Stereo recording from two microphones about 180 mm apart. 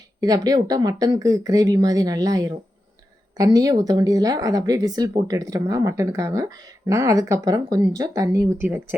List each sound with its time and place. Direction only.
0.2 s speech: 20° right (ahead or behind)